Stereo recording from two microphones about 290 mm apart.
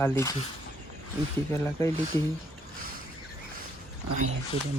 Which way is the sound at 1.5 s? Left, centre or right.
Centre.